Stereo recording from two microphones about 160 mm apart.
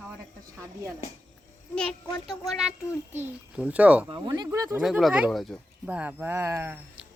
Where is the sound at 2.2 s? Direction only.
Centre (ahead or behind).